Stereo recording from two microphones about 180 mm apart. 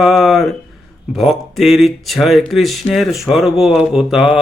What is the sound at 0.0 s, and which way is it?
Mantra, centre (ahead or behind).